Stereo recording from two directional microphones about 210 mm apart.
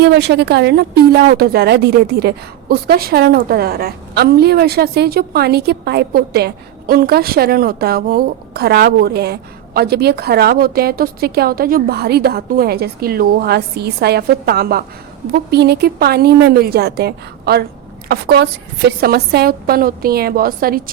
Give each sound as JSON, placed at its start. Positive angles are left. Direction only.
{"t": 0.0, "sound": "a woman's voice", "side_deg": -55}